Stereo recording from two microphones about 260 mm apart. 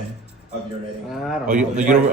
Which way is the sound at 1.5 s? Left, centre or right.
Right.